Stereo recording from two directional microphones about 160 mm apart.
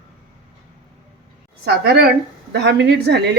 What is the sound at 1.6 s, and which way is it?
A woman's voice, 90° right.